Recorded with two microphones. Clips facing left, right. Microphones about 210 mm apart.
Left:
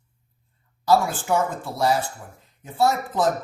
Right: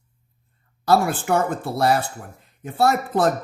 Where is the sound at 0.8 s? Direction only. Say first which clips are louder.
Right 1 dB; 60° right (ahead or behind).